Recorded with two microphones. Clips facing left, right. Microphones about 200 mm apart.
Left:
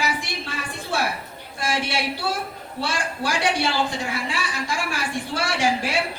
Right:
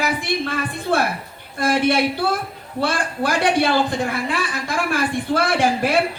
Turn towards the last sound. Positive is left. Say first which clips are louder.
# right 5 dB
turn(degrees=-55)  # may be behind; listen again after turning